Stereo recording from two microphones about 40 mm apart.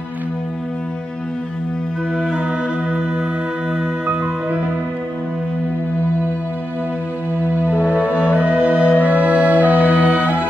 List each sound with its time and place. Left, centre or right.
2.1 s music: centre
4.1 s music: right
7.6 s music: right